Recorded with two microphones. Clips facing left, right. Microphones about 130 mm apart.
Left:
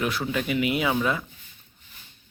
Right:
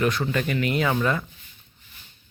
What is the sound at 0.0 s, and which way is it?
A man's voice, 5° left (ahead or behind).